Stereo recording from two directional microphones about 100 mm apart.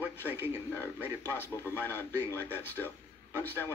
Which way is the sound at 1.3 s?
20° left (ahead or behind).